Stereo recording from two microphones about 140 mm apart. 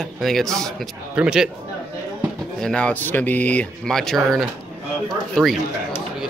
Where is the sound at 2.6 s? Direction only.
5° left (ahead or behind).